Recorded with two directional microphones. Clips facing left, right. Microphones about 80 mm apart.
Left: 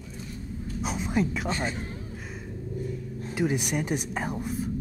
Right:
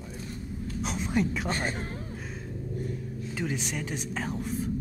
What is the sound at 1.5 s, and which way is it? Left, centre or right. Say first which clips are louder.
Speech: left 1 dB; right.